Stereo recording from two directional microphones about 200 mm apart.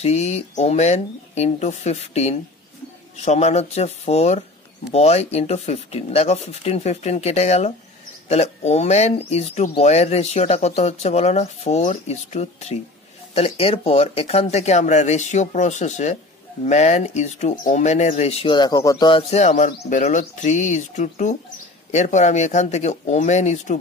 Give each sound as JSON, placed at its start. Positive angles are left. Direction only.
{"t": 0.0, "sound": "speech", "side_deg": 35}